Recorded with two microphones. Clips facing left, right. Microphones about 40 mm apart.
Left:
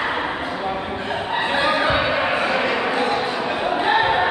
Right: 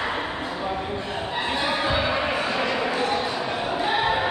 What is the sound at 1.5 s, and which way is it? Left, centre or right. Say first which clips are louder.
Basketball bounce: left 5 dB; left.